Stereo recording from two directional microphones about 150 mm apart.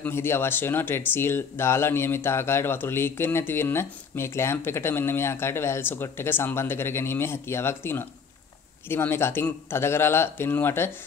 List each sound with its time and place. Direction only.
0.0 s speech: 15° left (ahead or behind)